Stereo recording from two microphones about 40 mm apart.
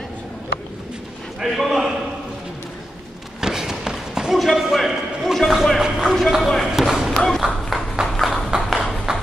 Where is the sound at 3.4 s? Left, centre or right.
Centre.